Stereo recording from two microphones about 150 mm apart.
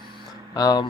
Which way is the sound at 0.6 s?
25° left (ahead or behind).